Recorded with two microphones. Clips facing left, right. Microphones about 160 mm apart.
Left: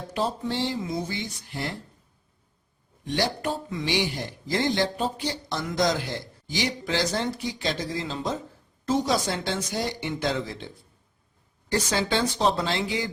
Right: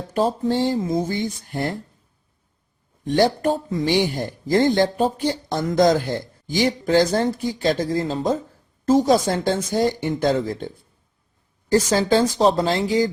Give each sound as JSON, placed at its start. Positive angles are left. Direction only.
{"t": 0.1, "sound": "a man's voice", "side_deg": -45}
{"t": 3.0, "sound": "a man's voice", "side_deg": -45}
{"t": 11.7, "sound": "speech", "side_deg": -40}